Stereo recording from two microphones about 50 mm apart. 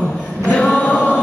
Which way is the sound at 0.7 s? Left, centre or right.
Left.